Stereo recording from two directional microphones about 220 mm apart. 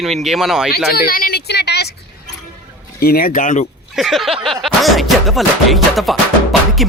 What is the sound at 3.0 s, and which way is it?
Speech, 45° left (ahead or behind).